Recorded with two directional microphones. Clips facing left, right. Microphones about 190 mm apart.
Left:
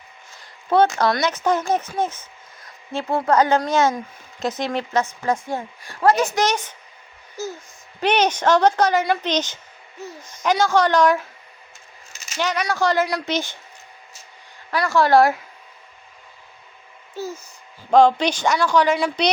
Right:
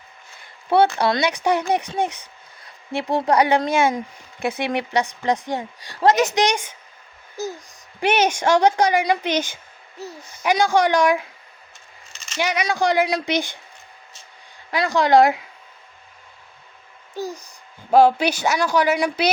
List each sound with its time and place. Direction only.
1.0 s speech: 15° right (ahead or behind)
12.1 s a sound: 10° left (ahead or behind)
12.4 s speech: 15° right (ahead or behind)
14.7 s speech: 15° right (ahead or behind)
17.2 s speech: 15° right (ahead or behind)